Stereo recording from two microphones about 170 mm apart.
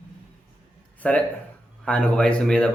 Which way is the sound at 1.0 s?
10° left (ahead or behind).